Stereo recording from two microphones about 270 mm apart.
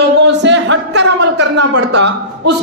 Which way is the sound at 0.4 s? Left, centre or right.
Right.